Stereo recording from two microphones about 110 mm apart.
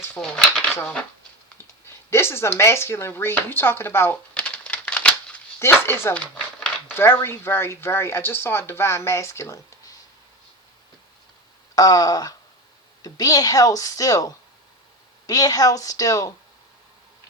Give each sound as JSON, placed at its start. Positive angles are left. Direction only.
{"t": 0.2, "sound": "speech", "side_deg": 5}
{"t": 2.0, "sound": "speech", "side_deg": 20}
{"t": 4.4, "sound": "a sound", "side_deg": 10}
{"t": 5.5, "sound": "speech", "side_deg": 20}
{"t": 6.1, "sound": "a sound", "side_deg": 10}
{"t": 6.9, "sound": "speech", "side_deg": 20}
{"t": 11.7, "sound": "speech", "side_deg": 35}